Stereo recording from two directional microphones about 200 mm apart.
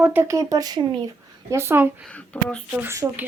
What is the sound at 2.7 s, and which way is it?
Speech, 10° right (ahead or behind).